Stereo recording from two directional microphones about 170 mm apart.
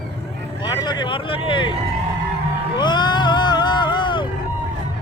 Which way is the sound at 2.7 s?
25° left (ahead or behind).